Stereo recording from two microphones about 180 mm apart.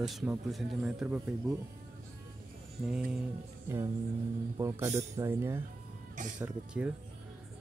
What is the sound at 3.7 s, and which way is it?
A man's voice, 15° right (ahead or behind).